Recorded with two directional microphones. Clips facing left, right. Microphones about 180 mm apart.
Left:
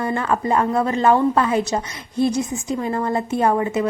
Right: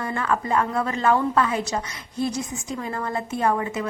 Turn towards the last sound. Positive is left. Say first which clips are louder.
# left 5 dB
turn(degrees=30)  # may be behind; listen again after turning